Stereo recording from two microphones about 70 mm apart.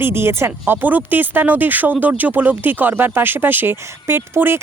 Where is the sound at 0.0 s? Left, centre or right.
Right.